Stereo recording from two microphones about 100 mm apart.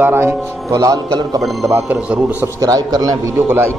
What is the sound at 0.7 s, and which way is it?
Speech, 35° right (ahead or behind).